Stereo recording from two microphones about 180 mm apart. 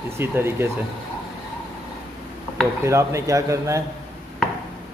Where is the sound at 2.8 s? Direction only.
15° right (ahead or behind).